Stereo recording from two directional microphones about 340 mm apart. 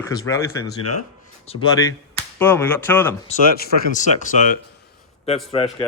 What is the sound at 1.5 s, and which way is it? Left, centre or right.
Speech, centre.